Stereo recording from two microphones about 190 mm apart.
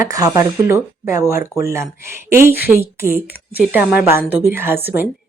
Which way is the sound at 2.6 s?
10° right (ahead or behind).